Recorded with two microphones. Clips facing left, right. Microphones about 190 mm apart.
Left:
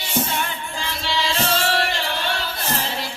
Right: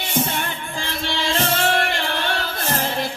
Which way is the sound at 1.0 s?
55° right (ahead or behind).